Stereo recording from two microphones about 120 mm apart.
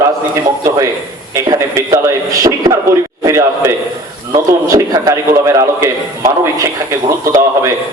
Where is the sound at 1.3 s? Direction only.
25° right (ahead or behind).